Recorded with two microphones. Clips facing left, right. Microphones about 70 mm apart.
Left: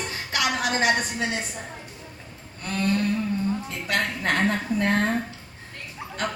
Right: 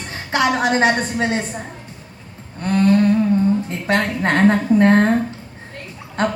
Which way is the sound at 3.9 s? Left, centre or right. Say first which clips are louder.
Right 7 dB; right.